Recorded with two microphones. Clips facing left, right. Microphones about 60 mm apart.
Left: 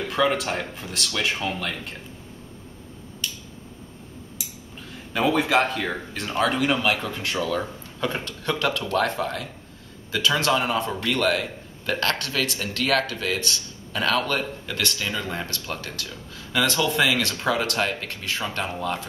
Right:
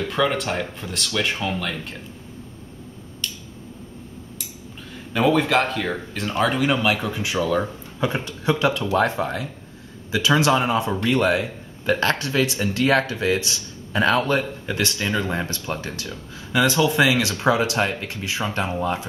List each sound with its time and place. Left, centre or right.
0.0 s speech: centre
4.9 s speech: centre; by 13.4 s right
13.4 s a sound: centre
14.0 s speech: right